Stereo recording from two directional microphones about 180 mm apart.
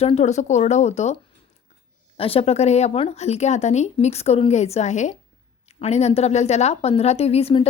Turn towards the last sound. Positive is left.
turn(degrees=35)  # may be behind; listen again after turning